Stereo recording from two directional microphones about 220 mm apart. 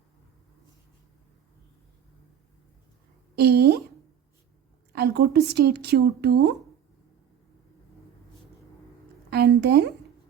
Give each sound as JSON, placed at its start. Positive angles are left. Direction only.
{"t": 3.3, "sound": "a sound", "side_deg": -45}
{"t": 4.9, "sound": "speech", "side_deg": -50}
{"t": 9.3, "sound": "speech", "side_deg": -50}